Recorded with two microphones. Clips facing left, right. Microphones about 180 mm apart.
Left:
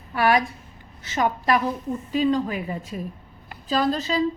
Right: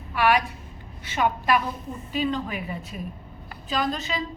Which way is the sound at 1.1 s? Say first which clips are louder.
Left 1 dB; 40° left (ahead or behind).